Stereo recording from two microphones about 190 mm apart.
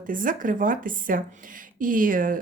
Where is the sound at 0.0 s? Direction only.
45° right (ahead or behind).